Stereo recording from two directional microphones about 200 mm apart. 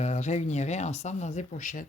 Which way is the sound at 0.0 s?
35° left (ahead or behind).